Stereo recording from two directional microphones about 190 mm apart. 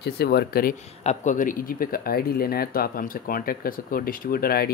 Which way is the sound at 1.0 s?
40° left (ahead or behind).